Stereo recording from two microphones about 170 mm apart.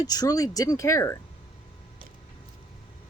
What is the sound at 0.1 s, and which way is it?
Speech, 20° left (ahead or behind).